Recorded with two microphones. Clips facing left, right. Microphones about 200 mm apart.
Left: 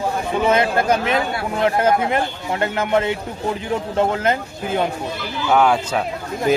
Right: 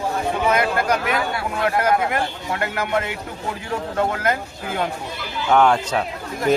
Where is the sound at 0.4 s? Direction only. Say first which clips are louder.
Left 4 dB; 25° left (ahead or behind).